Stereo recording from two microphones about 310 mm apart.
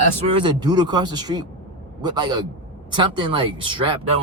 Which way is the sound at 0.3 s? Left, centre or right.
Centre.